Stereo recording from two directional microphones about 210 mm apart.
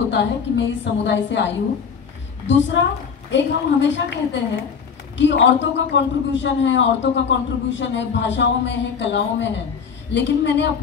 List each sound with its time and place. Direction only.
0.1 s a man's voice: 60° left (ahead or behind)